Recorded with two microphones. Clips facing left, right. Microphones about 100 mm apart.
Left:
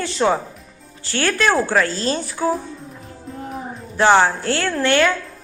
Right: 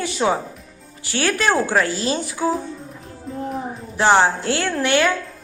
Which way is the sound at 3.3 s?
Centre (ahead or behind).